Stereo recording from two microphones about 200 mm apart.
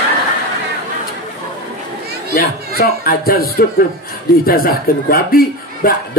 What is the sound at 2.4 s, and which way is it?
A man's voice, 50° left (ahead or behind).